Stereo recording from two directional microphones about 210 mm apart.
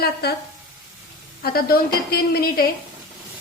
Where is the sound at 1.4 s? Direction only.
45° left (ahead or behind).